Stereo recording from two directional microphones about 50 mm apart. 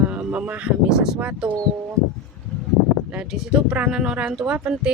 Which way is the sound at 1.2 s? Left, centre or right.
Right.